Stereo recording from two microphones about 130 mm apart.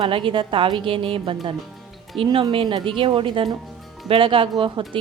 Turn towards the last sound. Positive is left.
turn(degrees=-40)  # may be behind; listen again after turning